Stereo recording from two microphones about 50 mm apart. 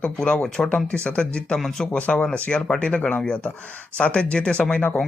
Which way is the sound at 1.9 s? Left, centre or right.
Left.